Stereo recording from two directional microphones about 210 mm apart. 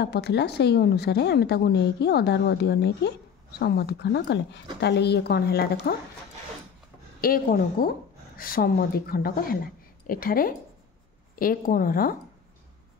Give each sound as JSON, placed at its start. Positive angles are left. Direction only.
{"t": 0.0, "sound": "speech", "side_deg": 50}
{"t": 7.2, "sound": "speech", "side_deg": 45}